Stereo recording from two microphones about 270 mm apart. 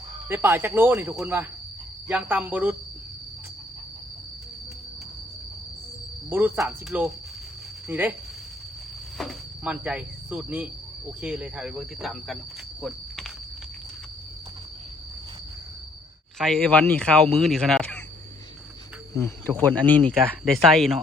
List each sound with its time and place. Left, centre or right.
0.3 s speech: centre
6.3 s speech: centre
9.1 s speech: centre
12.8 s walk: centre
16.4 s speech: centre
19.1 s speech: centre